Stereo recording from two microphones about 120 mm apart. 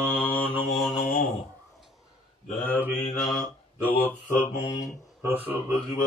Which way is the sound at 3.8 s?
15° left (ahead or behind).